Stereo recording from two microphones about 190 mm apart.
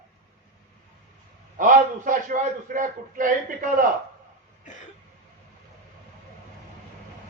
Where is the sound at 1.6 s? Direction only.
45° right (ahead or behind).